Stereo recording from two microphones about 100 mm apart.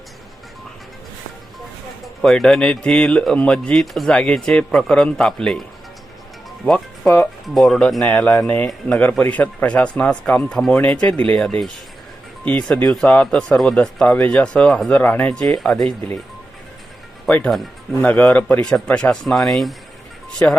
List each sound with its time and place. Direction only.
2.2 s speech: 5° left (ahead or behind)
6.7 s speech: 5° left (ahead or behind)
17.2 s speech: 15° left (ahead or behind)
20.4 s speech: 20° left (ahead or behind)